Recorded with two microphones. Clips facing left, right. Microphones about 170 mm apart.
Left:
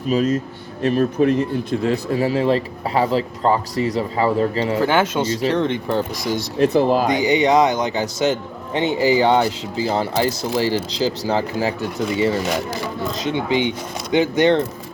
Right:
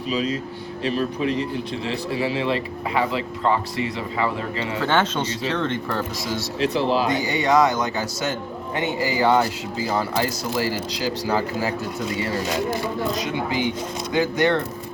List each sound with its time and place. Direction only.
0.1 s speech: 45° left (ahead or behind)
4.8 s speech: 10° left (ahead or behind)
6.6 s speech: 50° left (ahead or behind)
7.1 s a man's voice: 15° left (ahead or behind)
12.5 s speech: 85° left
13.1 s a man's voice: 25° left (ahead or behind)